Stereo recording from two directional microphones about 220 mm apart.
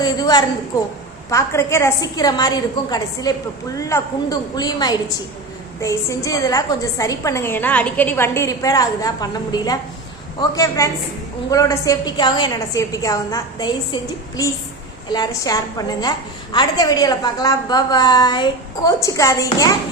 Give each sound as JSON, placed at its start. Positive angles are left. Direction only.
{"t": 0.0, "sound": "a woman's voice", "side_deg": 20}